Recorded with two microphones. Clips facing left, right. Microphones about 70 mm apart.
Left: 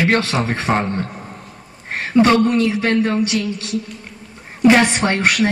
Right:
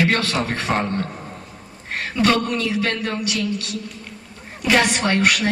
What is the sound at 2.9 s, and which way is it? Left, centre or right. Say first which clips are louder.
Speech: left 7 dB; centre.